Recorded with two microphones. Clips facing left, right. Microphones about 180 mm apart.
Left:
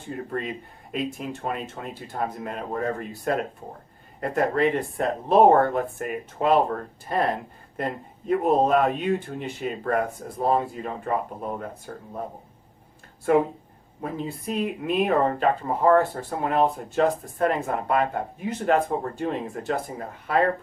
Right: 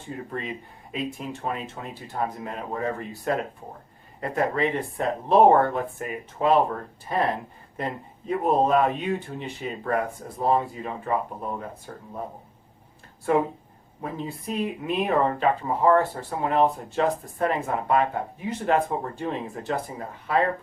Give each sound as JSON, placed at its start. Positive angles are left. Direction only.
{"t": 0.3, "sound": "speech", "side_deg": 50}
{"t": 14.5, "sound": "speech", "side_deg": 60}